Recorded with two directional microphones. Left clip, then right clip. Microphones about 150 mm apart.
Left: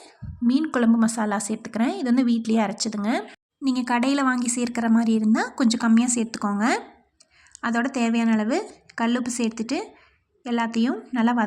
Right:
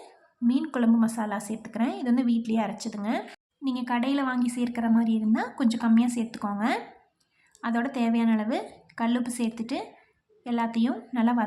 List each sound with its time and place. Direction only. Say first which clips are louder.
0.4 s a woman's voice: left 4 dB; 30° left (ahead or behind)